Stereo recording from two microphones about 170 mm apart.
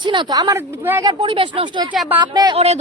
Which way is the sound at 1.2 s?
30° right (ahead or behind).